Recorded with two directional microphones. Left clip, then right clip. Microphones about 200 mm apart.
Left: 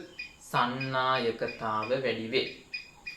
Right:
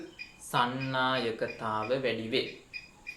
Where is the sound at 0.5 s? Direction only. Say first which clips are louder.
Left 1 dB; 30° right (ahead or behind).